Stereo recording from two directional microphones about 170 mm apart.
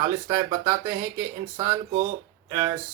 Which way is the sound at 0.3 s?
15° right (ahead or behind).